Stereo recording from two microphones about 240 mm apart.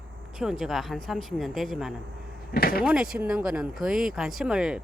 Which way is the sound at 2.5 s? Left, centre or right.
Left.